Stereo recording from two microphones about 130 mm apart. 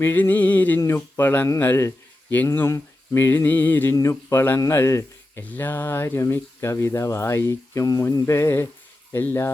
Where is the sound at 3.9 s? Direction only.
25° left (ahead or behind).